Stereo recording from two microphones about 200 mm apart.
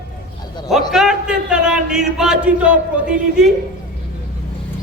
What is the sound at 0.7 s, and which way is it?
A man's voice, centre (ahead or behind).